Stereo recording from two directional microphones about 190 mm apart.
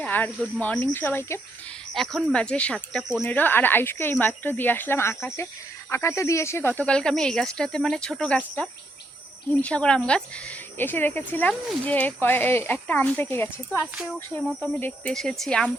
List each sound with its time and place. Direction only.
0.0 s speech: 10° left (ahead or behind)
13.9 s speech: 5° right (ahead or behind)
14.3 s speech: 10° left (ahead or behind)